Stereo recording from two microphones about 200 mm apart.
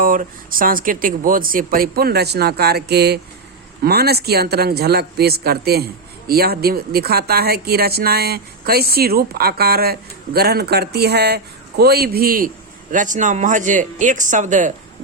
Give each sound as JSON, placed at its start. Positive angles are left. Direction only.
{"t": 0.0, "sound": "speech", "side_deg": -45}